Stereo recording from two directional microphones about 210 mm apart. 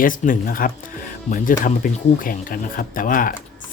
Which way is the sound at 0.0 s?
40° left (ahead or behind).